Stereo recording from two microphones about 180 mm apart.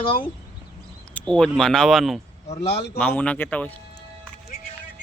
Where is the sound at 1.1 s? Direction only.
5° left (ahead or behind).